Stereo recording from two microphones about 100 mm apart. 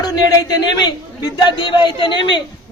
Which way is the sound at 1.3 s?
55° left (ahead or behind).